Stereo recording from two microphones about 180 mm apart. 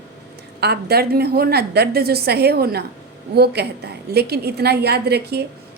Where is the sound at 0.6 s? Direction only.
60° right (ahead or behind).